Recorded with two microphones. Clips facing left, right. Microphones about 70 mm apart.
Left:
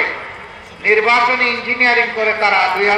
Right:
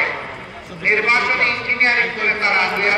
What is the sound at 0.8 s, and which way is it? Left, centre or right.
A man's voice, left.